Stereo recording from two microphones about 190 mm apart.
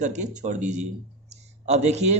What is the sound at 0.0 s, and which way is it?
A man's voice, 40° right (ahead or behind).